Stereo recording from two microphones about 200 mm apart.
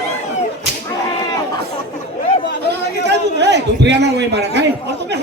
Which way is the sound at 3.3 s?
60° right (ahead or behind).